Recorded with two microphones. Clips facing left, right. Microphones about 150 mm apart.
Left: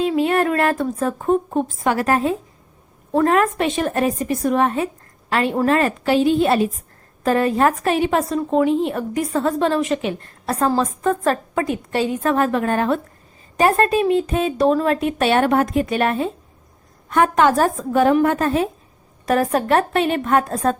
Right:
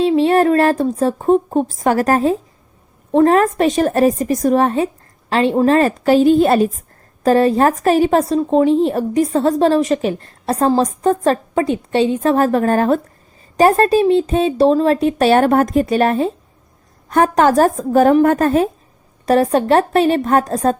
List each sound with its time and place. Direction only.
0.0 s a woman's voice: 30° right (ahead or behind)
19.2 s a woman's voice: 30° right (ahead or behind)